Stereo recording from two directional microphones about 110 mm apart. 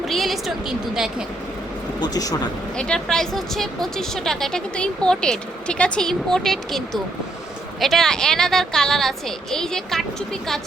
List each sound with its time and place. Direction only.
0.0 s a woman's voice: centre (ahead or behind)
2.0 s speech: 35° left (ahead or behind)
2.7 s speech: 5° left (ahead or behind)